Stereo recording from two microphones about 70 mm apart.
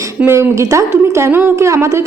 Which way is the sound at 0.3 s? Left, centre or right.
Right.